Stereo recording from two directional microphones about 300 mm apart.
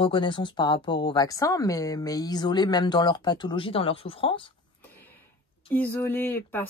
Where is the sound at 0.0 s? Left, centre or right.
Centre.